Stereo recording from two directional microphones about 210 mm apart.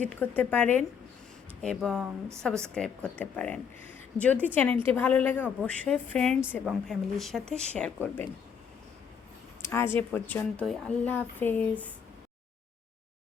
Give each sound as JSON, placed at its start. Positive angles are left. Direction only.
{"t": 0.0, "sound": "a woman's voice", "side_deg": 10}
{"t": 9.6, "sound": "a woman's voice", "side_deg": 10}